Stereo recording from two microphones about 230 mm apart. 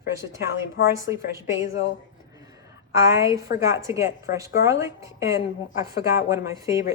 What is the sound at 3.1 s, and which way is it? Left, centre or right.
A woman's voice, centre.